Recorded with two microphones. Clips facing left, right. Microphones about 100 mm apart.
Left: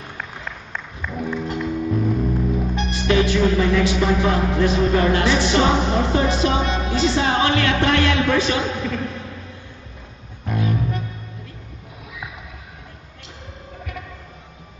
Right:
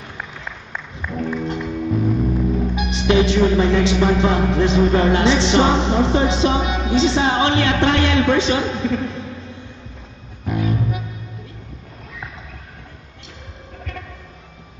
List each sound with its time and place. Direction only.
0.2 s a sound: 5° right (ahead or behind)
1.2 s music: centre (ahead or behind)
3.1 s music: 25° right (ahead or behind)
6.6 s music: 5° right (ahead or behind)
6.9 s music: 25° right (ahead or behind)
10.4 s music: centre (ahead or behind)